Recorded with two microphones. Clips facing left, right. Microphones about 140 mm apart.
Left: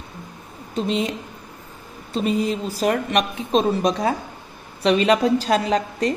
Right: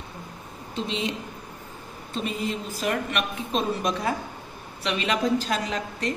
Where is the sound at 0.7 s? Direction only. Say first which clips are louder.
Left 6 dB; 45° left (ahead or behind).